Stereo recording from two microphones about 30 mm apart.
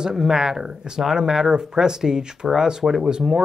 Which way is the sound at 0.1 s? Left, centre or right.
Centre.